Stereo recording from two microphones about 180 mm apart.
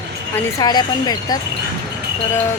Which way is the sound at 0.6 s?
20° left (ahead or behind).